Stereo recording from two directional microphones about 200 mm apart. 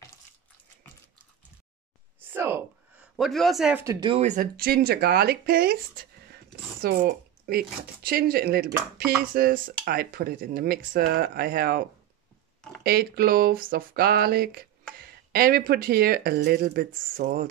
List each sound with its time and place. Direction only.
2.1 s a sound: 10° right (ahead or behind)
3.2 s a man's voice: centre (ahead or behind)
3.8 s speech: 15° right (ahead or behind)
4.1 s speech: 35° right (ahead or behind)